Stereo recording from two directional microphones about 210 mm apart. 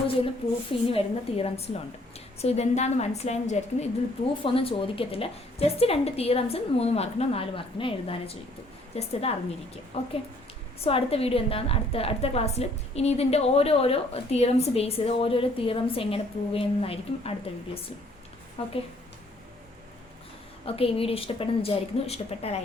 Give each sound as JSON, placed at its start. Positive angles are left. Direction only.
{"t": 0.7, "sound": "a woman's voice", "side_deg": 25}
{"t": 20.7, "sound": "a woman's voice", "side_deg": 25}